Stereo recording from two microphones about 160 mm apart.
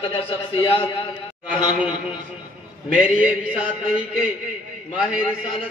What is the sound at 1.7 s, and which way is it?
A man's voice, 5° right (ahead or behind).